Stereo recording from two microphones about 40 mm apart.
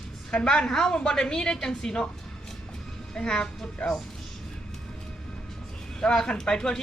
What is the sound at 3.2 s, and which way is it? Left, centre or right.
Speech, centre.